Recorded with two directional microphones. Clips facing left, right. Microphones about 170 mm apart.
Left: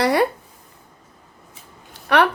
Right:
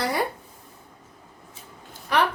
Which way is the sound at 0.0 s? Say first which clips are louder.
Left 8 dB; 75° left (ahead or behind).